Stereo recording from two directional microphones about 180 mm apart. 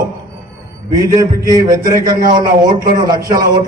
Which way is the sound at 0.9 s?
20° right (ahead or behind).